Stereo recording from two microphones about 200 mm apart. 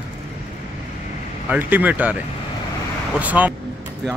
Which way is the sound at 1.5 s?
10° right (ahead or behind).